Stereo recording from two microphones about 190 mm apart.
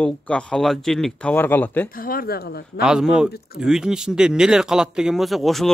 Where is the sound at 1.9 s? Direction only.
50° left (ahead or behind).